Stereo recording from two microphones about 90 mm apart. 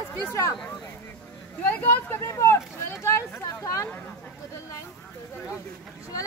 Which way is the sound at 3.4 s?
40° left (ahead or behind).